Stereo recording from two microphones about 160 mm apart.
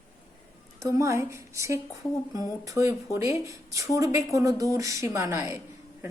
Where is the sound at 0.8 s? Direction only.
20° right (ahead or behind).